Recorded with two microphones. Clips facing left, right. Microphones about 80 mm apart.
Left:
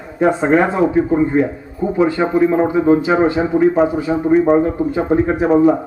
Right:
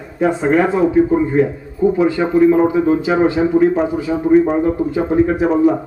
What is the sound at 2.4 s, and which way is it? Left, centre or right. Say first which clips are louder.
Speech: right 1 dB; left.